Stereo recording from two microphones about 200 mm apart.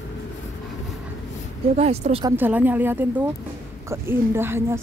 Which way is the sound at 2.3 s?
10° right (ahead or behind).